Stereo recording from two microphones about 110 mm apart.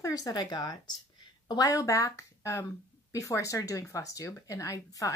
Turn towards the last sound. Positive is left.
turn(degrees=30)  # may be behind; listen again after turning